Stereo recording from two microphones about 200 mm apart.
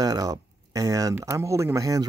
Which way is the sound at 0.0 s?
15° right (ahead or behind).